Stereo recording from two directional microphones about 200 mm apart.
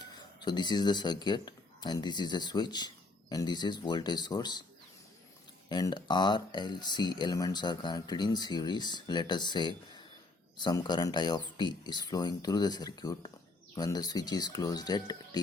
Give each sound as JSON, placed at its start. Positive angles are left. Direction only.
{"t": 0.0, "sound": "speech", "side_deg": 20}
{"t": 5.6, "sound": "speech", "side_deg": 20}